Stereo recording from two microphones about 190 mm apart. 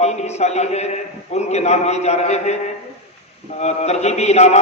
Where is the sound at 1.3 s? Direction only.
35° left (ahead or behind).